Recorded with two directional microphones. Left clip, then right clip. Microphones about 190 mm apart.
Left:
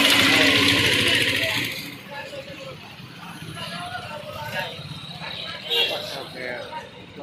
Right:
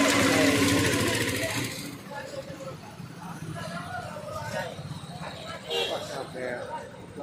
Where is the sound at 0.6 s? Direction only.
50° right (ahead or behind).